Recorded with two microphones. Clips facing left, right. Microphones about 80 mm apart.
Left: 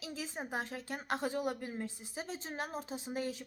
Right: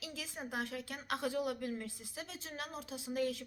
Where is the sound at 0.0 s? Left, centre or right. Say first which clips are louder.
Left 3 dB; left.